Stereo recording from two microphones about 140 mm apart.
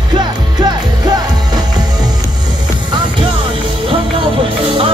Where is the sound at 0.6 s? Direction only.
30° right (ahead or behind).